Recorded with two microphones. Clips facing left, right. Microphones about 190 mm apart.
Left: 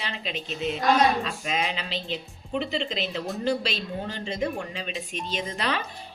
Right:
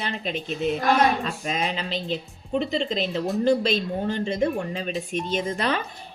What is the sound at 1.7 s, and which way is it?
A woman's voice, 45° right (ahead or behind).